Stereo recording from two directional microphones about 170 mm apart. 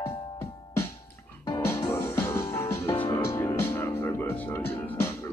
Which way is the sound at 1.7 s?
15° left (ahead or behind).